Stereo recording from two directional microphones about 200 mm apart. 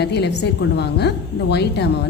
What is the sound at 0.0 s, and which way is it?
A woman's voice, 55° left (ahead or behind).